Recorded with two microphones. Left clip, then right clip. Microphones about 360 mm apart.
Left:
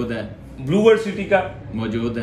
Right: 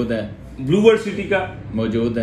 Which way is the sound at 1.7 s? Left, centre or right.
Centre.